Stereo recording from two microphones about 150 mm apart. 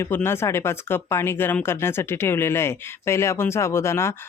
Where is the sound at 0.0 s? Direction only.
15° left (ahead or behind).